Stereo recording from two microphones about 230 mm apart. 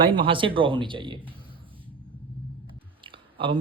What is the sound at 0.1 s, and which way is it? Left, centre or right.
Speech, right.